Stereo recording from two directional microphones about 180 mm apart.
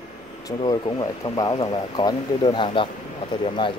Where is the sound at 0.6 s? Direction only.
25° left (ahead or behind).